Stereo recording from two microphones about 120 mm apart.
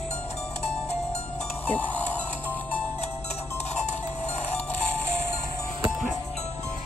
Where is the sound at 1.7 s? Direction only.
15° left (ahead or behind).